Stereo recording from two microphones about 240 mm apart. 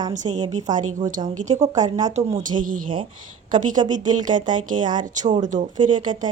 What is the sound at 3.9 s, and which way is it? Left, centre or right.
Speech, right.